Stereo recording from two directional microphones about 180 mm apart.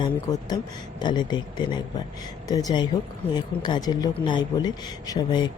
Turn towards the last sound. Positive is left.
turn(degrees=25)  # may be behind; listen again after turning